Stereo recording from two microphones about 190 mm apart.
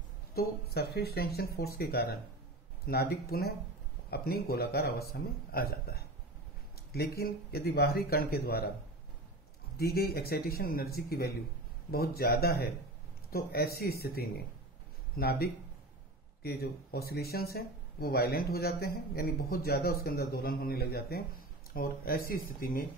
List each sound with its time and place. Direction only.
0.3 s speech: 55° left (ahead or behind)
9.8 s speech: 55° left (ahead or behind)